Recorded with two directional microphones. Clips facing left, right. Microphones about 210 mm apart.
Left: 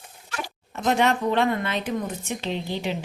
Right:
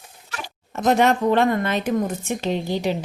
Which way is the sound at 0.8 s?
45° right (ahead or behind).